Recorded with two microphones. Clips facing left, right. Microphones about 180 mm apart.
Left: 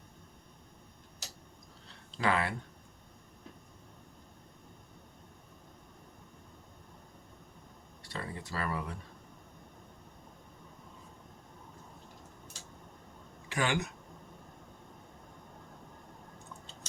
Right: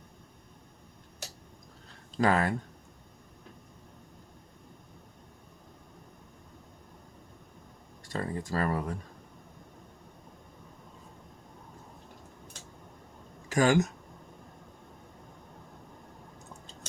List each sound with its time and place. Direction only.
2.1 s speech: 45° right (ahead or behind)
8.0 s speech: 45° right (ahead or behind)
13.5 s speech: 40° right (ahead or behind)